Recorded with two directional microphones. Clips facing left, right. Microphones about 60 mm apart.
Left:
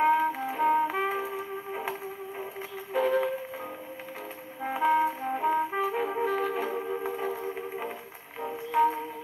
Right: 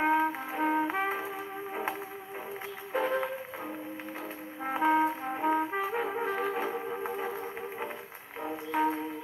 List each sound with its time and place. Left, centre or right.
0.0 s trumpet: centre
1.7 s music: centre
3.0 s music: centre
4.6 s brass instrument: centre
6.2 s music: centre
8.4 s music: centre